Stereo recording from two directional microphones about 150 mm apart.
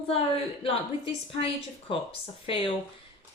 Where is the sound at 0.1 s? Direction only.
40° left (ahead or behind).